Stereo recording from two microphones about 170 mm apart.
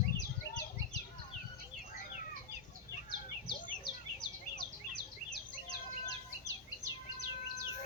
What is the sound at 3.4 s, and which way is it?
Bird, 25° left (ahead or behind).